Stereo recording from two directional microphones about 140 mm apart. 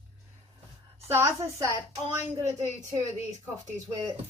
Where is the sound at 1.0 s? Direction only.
20° right (ahead or behind).